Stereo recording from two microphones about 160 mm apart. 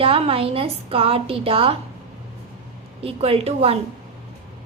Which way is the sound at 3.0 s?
40° right (ahead or behind).